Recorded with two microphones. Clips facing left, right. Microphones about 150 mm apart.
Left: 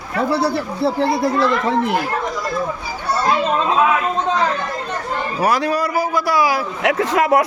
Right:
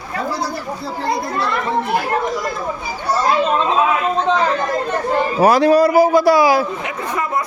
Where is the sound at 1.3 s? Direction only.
90° left.